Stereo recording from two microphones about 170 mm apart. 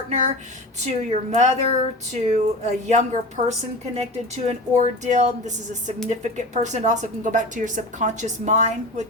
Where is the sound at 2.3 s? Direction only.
40° right (ahead or behind).